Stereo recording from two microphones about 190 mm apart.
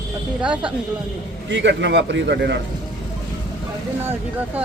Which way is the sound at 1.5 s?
70° right (ahead or behind).